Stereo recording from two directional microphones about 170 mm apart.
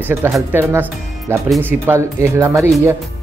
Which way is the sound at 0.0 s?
15° right (ahead or behind).